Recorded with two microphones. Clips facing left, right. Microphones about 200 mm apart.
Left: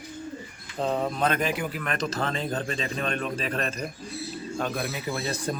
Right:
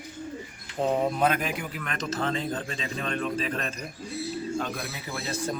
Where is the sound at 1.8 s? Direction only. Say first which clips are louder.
Left 4 dB; 40° left (ahead or behind).